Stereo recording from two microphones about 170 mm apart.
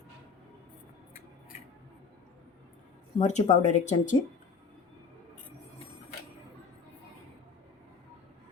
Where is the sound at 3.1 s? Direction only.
45° left (ahead or behind).